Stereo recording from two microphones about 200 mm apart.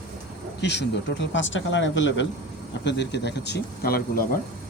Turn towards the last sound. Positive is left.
turn(degrees=50)  # may be behind; listen again after turning